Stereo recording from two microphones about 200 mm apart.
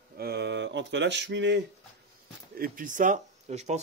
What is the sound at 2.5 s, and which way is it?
Speech, 45° right (ahead or behind).